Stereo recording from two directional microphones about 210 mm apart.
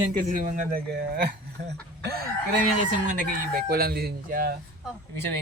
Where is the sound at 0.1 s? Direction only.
40° right (ahead or behind).